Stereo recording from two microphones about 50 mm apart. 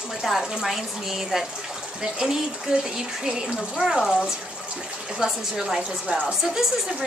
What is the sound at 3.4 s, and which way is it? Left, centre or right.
Speech, centre.